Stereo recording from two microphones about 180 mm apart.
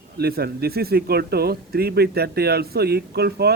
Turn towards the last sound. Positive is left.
turn(degrees=-65)  # may be behind; listen again after turning